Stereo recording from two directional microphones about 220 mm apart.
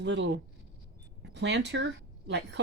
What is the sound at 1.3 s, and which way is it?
Speech, 50° right (ahead or behind).